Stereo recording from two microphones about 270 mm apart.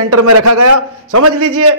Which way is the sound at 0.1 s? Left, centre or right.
Right.